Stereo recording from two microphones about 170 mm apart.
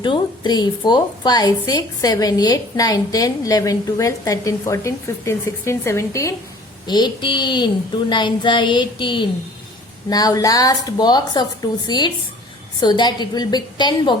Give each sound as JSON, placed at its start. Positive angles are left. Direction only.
{"t": 0.0, "sound": "a woman's voice", "side_deg": 25}